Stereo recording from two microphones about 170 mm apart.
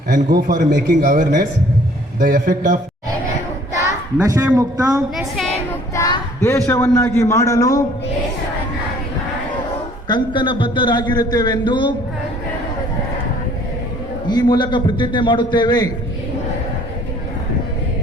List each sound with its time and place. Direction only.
0.1 s a man's voice: 60° right (ahead or behind)
3.8 s a sound: 20° right (ahead or behind)
4.5 s speech: 20° right (ahead or behind)
5.9 s a woman's voice: 15° left (ahead or behind)
10.1 s a man's voice: 30° left (ahead or behind)
14.3 s a man's voice: 25° left (ahead or behind)